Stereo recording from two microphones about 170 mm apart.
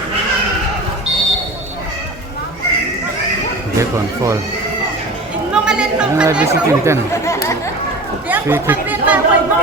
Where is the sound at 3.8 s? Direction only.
20° right (ahead or behind).